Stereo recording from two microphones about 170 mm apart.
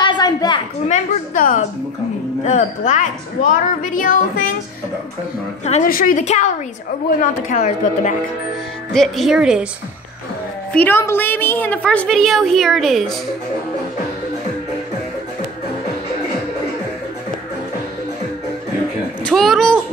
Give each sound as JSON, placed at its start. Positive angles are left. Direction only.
{"t": 0.0, "sound": "a sound", "side_deg": 25}
{"t": 0.8, "sound": "a woman's voice", "side_deg": 50}
{"t": 5.9, "sound": "a woman's voice", "side_deg": 55}
{"t": 8.9, "sound": "speech", "side_deg": 0}
{"t": 10.7, "sound": "a woman's voice", "side_deg": 10}
{"t": 19.2, "sound": "a sound", "side_deg": 0}